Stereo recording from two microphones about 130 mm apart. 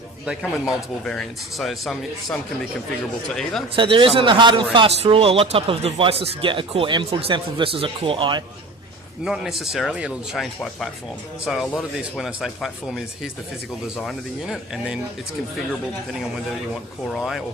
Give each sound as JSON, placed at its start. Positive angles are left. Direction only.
{"t": 1.0, "sound": "speech", "side_deg": 5}
{"t": 3.8, "sound": "speech", "side_deg": -40}
{"t": 9.2, "sound": "speech", "side_deg": -5}
{"t": 17.2, "sound": "speech", "side_deg": 0}